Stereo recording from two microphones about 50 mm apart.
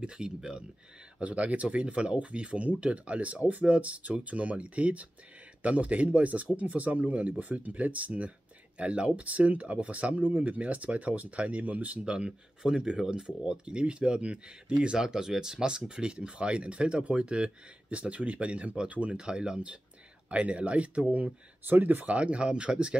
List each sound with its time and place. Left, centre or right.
0.0 s speech: centre
1.2 s speech: right
12.0 s speech: right